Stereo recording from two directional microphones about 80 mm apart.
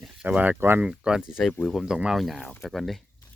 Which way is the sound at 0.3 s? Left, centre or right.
Right.